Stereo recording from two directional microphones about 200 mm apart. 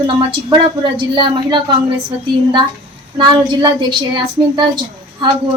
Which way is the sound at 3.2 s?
20° right (ahead or behind).